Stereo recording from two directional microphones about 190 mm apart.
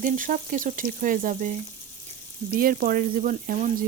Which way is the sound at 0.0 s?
45° right (ahead or behind).